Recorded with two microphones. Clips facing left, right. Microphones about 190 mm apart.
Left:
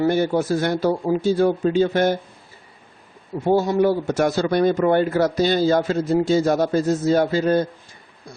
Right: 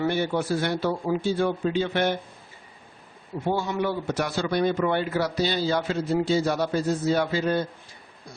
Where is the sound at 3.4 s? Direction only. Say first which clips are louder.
Left 8 dB; 40° left (ahead or behind).